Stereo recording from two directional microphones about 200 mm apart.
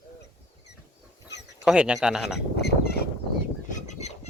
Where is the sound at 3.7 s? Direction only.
35° left (ahead or behind).